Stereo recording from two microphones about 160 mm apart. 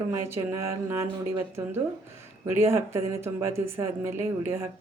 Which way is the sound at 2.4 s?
15° right (ahead or behind).